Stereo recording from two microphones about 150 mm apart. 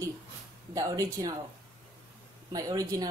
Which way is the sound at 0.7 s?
20° right (ahead or behind).